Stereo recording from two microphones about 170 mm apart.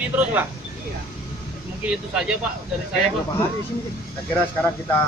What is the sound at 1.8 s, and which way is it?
Speech, 5° right (ahead or behind).